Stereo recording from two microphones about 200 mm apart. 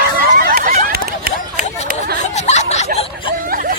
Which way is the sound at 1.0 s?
50° right (ahead or behind).